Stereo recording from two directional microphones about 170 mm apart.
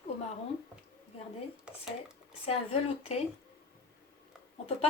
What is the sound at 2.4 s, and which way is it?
Speech, 35° left (ahead or behind).